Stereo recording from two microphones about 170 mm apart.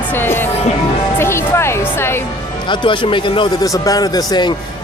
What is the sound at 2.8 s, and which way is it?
A man's voice, 30° left (ahead or behind).